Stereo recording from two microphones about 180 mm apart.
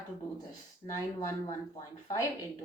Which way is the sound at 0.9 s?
15° left (ahead or behind).